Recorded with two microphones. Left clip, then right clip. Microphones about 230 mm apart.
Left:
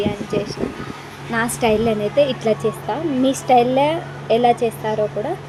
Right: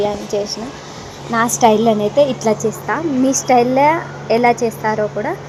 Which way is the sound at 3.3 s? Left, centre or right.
Centre.